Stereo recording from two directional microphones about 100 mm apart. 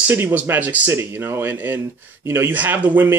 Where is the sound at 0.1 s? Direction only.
20° right (ahead or behind).